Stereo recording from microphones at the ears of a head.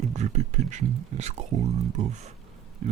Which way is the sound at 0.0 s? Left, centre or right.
Right.